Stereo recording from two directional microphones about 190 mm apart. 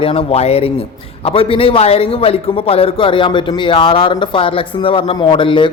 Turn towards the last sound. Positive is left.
turn(degrees=25)  # may be behind; listen again after turning